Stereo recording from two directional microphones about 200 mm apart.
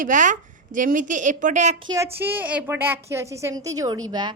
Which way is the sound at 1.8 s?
15° right (ahead or behind).